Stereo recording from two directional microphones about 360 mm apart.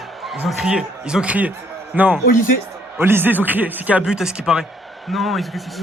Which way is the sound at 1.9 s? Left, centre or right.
Centre.